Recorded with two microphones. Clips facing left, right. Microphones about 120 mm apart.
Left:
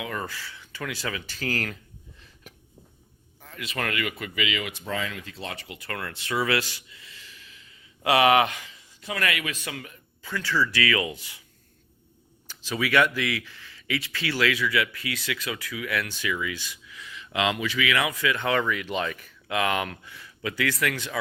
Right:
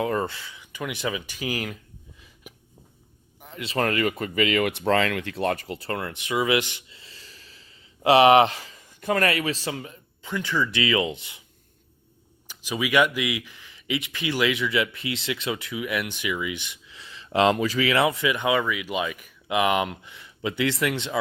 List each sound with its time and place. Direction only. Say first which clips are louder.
0.0 s speech: right 7 dB; 35° right (ahead or behind); by 1.8 s 10° right (ahead or behind)
2.5 s a sound: right 3 dB; 10° right (ahead or behind)
3.4 s speech: right 6 dB; 25° right (ahead or behind)
9.0 s speech: right 6 dB; 45° right (ahead or behind); by 11.4 s 20° right (ahead or behind)
12.5 s speech: right 1 dB; 15° right (ahead or behind)